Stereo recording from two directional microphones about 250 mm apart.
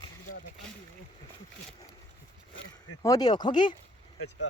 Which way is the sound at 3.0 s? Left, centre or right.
Centre.